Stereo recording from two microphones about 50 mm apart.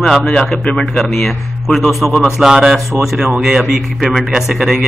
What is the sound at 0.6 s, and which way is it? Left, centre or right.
Speech, left.